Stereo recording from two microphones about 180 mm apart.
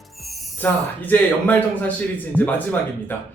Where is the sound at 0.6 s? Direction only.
10° left (ahead or behind).